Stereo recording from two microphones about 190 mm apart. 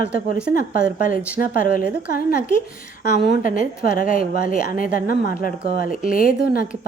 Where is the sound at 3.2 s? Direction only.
50° left (ahead or behind).